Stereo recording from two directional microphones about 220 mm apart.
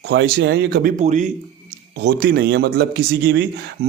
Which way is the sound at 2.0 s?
45° right (ahead or behind).